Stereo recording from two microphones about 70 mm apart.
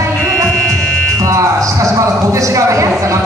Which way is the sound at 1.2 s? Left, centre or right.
Right.